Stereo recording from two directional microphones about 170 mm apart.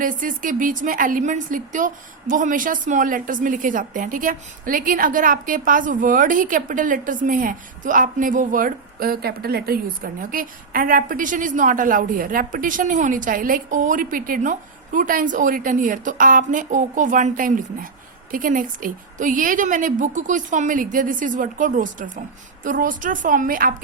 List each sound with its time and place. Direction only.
0.0 s a woman's voice: 50° right (ahead or behind)